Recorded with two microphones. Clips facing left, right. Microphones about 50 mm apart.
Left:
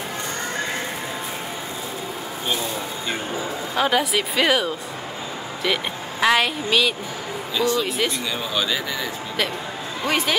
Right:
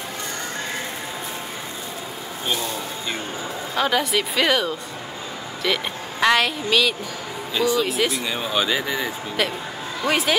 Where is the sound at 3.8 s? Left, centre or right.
Centre.